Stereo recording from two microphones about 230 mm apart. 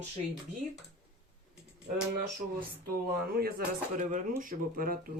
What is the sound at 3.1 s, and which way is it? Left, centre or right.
Speech, right.